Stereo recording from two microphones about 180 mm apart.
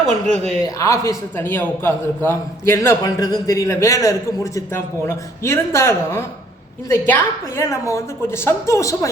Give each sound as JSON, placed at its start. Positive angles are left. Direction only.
{"t": 0.6, "sound": "a man's voice", "side_deg": 20}